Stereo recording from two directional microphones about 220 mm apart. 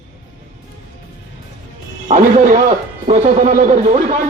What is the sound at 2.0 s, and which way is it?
A man's voice, 35° right (ahead or behind).